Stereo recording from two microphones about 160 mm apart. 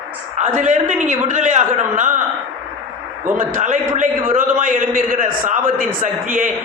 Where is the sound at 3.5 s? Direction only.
55° right (ahead or behind).